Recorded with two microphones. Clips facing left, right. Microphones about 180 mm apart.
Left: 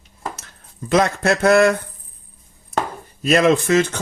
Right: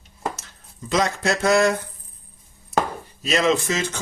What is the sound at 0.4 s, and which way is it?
Speech, 60° left (ahead or behind).